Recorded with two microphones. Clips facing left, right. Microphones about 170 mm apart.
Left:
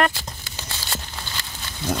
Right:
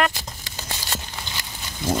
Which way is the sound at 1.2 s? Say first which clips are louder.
Even; 15° right (ahead or behind).